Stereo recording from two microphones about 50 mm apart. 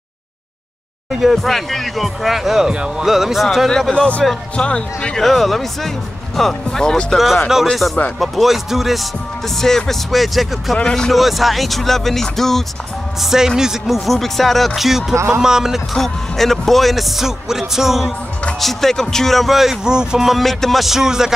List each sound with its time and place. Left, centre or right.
1.3 s speech: centre
3.9 s speech: left
5.2 s speech: centre
7.7 s speech: centre
9.6 s speech: centre
10.8 s speech: centre
11.1 s speech: centre
13.2 s speech: centre
15.1 s speech: right
15.4 s speech: centre
15.9 s speech: centre
18.6 s speech: centre
20.4 s speech: centre